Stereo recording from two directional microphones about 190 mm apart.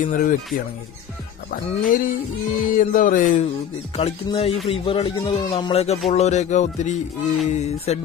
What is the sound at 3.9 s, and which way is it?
Speech, 30° left (ahead or behind).